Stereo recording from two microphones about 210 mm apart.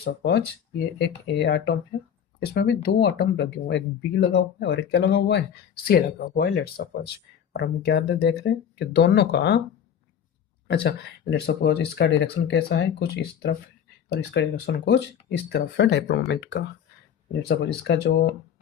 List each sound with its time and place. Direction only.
0.0 s speech: 55° left (ahead or behind)
10.8 s speech: 50° left (ahead or behind)
17.8 s speech: 50° left (ahead or behind)